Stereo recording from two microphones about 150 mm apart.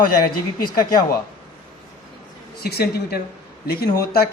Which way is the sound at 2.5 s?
90° left.